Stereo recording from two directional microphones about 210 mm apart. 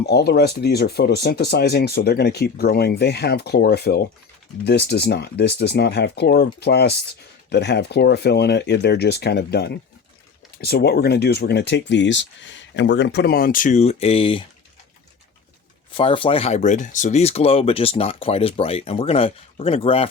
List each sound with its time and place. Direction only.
0.0 s speech: 50° left (ahead or behind); by 14.4 s 25° left (ahead or behind)
15.9 s speech: 25° left (ahead or behind)